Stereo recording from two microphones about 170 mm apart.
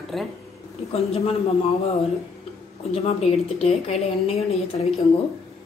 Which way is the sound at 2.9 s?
40° left (ahead or behind).